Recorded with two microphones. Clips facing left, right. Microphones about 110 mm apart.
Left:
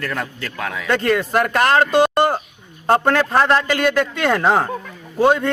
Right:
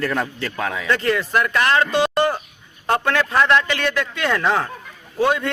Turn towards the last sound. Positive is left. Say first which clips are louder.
# left 4 dB
turn(degrees=40)  # may be behind; listen again after turning